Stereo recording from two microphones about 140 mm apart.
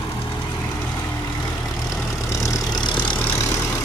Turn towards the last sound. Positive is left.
turn(degrees=35)  # may be behind; listen again after turning